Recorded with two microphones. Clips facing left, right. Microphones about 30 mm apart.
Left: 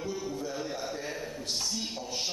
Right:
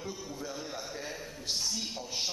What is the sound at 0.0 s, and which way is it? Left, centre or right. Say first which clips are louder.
Music: left 6 dB; centre.